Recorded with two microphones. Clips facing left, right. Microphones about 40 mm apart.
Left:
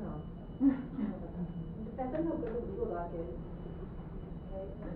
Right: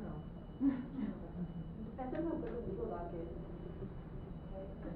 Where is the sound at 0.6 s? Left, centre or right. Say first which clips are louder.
Left 5 dB; centre.